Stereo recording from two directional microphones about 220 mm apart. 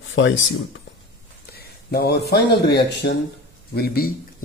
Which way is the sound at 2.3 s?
50° left (ahead or behind).